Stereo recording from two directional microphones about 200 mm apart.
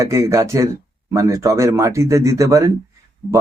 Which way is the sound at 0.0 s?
15° right (ahead or behind).